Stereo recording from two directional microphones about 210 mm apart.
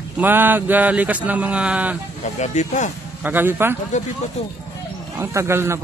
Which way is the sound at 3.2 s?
10° right (ahead or behind).